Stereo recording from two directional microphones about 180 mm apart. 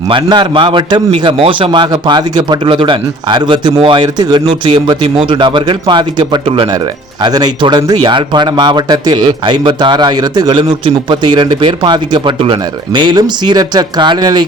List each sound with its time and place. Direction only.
0.1 s speech: 25° right (ahead or behind)